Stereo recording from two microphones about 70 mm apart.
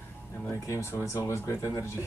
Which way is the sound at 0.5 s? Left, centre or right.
Left.